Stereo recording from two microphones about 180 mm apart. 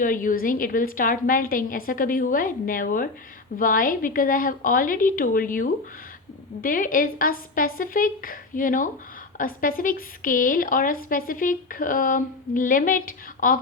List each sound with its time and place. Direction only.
0.0 s speech: 50° left (ahead or behind)